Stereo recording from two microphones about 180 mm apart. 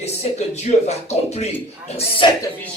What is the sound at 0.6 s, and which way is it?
A man's voice, 40° left (ahead or behind).